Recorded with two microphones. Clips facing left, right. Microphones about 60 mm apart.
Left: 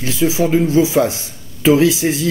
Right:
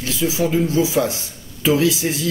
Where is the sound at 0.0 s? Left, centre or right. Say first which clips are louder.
Left 4 dB; left.